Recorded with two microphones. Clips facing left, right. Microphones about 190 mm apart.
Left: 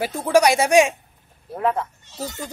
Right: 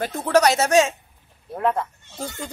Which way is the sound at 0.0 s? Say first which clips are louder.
Left 1 dB; 10° left (ahead or behind).